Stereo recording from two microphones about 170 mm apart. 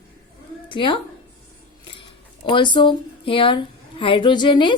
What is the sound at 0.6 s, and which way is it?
Speech, 30° left (ahead or behind).